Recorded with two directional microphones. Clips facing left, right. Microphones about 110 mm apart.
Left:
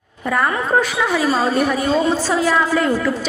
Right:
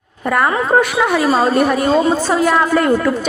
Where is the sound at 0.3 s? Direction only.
55° right (ahead or behind).